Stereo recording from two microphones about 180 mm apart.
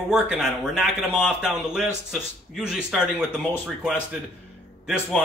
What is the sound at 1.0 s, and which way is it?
Speech, 10° left (ahead or behind).